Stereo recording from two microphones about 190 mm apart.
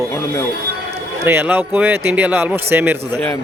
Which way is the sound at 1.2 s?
10° right (ahead or behind).